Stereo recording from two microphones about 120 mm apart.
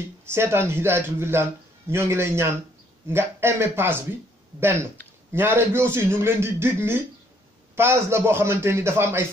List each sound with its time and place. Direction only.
0.2 s a man's voice: 20° right (ahead or behind)
5.3 s a man's voice: 20° right (ahead or behind)